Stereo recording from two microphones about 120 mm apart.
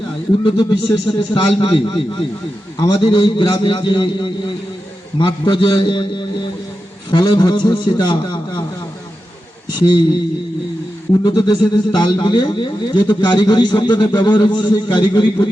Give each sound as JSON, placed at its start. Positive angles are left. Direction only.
{"t": 0.4, "sound": "a man's voice", "side_deg": 40}
{"t": 9.6, "sound": "speech", "side_deg": 35}
{"t": 11.2, "sound": "speech", "side_deg": 35}